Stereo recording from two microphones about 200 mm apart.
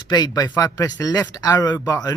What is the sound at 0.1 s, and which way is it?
Speech, 20° left (ahead or behind).